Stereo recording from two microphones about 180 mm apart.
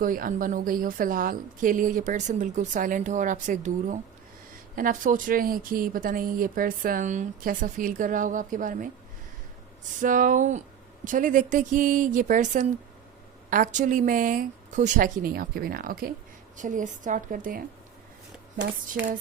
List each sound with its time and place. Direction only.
0.0 s a woman's voice: 50° right (ahead or behind)
10.0 s a woman's voice: 45° right (ahead or behind)